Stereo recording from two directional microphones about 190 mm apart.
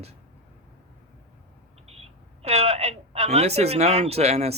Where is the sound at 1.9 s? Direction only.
35° right (ahead or behind).